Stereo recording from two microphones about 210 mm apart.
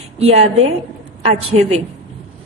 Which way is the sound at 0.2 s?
30° right (ahead or behind).